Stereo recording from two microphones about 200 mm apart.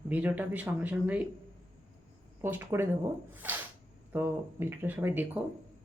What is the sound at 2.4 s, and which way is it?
Speech, 10° right (ahead or behind).